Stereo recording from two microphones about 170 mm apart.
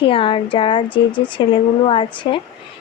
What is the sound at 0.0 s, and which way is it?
Speech, 30° left (ahead or behind).